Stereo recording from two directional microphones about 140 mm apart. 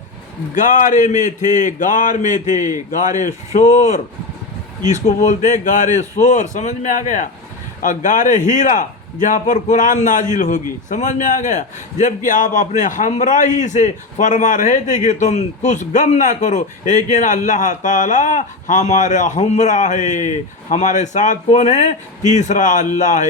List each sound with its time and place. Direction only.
0.5 s a man's voice: 65° left (ahead or behind)